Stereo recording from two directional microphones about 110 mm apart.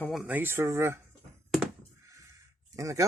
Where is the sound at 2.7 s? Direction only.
30° right (ahead or behind).